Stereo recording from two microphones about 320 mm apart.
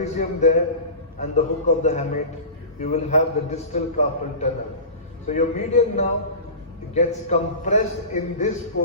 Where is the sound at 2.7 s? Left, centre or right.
Left.